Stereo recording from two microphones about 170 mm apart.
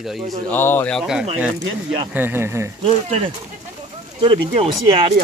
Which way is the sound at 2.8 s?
35° right (ahead or behind).